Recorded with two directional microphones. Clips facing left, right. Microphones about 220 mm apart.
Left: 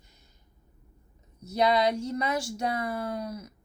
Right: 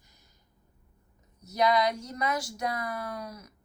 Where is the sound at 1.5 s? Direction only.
30° left (ahead or behind).